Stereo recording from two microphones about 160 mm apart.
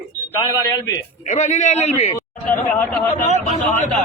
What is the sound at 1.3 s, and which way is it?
Speech, 45° left (ahead or behind).